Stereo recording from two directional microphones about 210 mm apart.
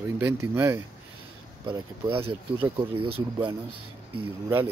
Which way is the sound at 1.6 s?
20° right (ahead or behind).